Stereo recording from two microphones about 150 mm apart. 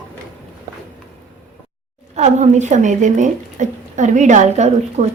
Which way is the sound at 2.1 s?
50° right (ahead or behind).